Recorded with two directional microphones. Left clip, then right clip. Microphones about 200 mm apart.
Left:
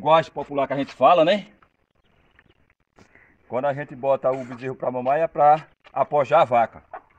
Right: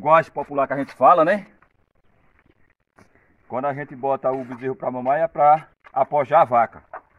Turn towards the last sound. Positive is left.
turn(degrees=15)  # may be behind; listen again after turning